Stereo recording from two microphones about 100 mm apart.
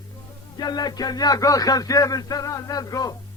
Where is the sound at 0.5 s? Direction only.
45° left (ahead or behind).